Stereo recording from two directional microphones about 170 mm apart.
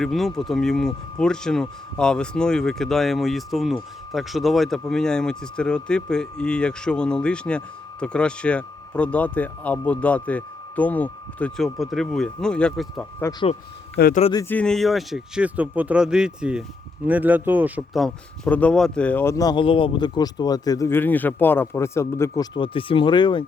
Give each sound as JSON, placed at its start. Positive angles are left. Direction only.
{"t": 0.0, "sound": "speech", "side_deg": 0}
{"t": 14.1, "sound": "speech", "side_deg": 40}
{"t": 14.3, "sound": "speech", "side_deg": 10}
{"t": 17.9, "sound": "speech", "side_deg": 5}
{"t": 22.5, "sound": "speech", "side_deg": 30}